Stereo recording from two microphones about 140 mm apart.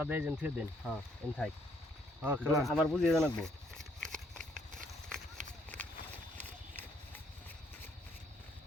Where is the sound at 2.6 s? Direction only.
Centre (ahead or behind).